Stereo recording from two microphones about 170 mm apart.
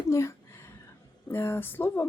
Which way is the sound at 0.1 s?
15° left (ahead or behind).